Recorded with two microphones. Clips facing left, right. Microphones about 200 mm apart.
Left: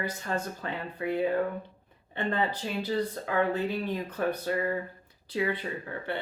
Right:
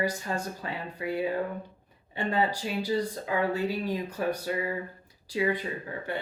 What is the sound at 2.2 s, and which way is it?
Speech, 10° right (ahead or behind).